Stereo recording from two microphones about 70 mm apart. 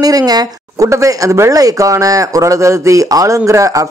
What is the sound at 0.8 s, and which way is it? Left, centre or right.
Speech, right.